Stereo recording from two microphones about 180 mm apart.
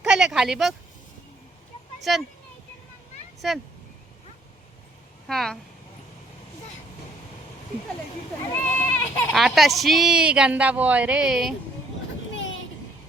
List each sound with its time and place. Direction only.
0.0 s a sound: 5° right (ahead or behind)
2.1 s speech: centre (ahead or behind)
3.4 s speech: centre (ahead or behind)
5.3 s speech: centre (ahead or behind)
8.4 s speech: 10° left (ahead or behind)
9.3 s speech: centre (ahead or behind)
12.3 s vehicle: 90° left